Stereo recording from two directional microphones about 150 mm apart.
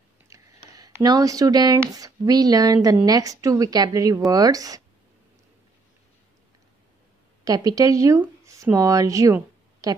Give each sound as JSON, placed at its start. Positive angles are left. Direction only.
{"t": 0.3, "sound": "a woman's voice", "side_deg": -20}
{"t": 7.4, "sound": "speech", "side_deg": -25}